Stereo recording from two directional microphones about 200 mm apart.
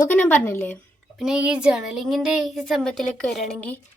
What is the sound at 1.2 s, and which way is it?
Speech, 5° right (ahead or behind).